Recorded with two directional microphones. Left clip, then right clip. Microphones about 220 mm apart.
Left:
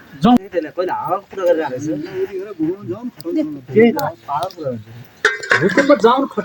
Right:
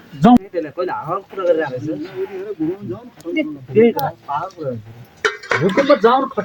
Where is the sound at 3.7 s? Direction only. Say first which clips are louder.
Even; 45° left (ahead or behind).